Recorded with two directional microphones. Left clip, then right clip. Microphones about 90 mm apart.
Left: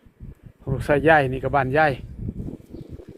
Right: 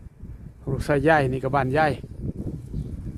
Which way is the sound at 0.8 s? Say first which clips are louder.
Left 3 dB; 25° right (ahead or behind).